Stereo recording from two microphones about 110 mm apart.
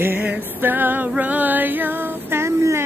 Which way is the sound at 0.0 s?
15° right (ahead or behind).